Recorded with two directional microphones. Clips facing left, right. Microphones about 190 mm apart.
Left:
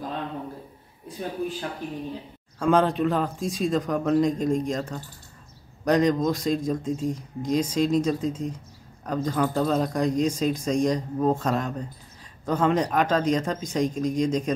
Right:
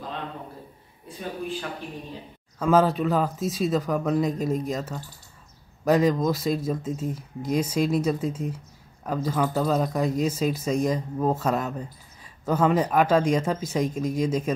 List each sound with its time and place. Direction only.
2.6 s speech: 5° right (ahead or behind)